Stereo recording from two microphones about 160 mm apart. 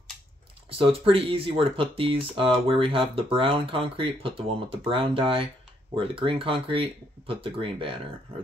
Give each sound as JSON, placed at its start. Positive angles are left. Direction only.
{"t": 0.7, "sound": "speech", "side_deg": -35}